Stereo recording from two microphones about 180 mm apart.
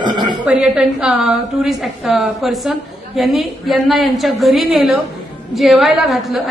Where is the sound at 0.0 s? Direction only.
25° right (ahead or behind).